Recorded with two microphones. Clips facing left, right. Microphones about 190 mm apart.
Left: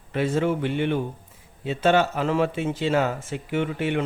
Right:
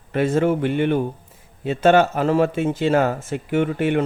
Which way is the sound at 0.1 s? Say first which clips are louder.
Right 4 dB; 50° right (ahead or behind).